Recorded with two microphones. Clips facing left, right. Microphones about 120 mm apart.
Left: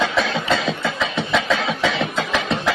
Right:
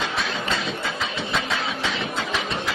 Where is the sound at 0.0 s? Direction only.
90° left.